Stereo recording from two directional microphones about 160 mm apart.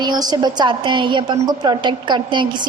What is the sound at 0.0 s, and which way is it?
A woman's voice, 25° right (ahead or behind).